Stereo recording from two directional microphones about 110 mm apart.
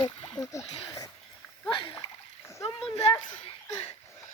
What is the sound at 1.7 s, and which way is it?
Splash, 50° left (ahead or behind).